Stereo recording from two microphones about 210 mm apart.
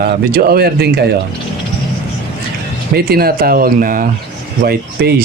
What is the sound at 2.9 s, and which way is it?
Speech, 45° right (ahead or behind).